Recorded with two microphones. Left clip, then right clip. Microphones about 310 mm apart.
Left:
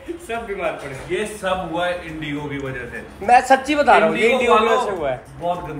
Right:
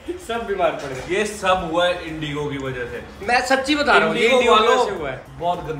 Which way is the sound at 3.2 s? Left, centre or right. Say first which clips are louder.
Left 4 dB; centre.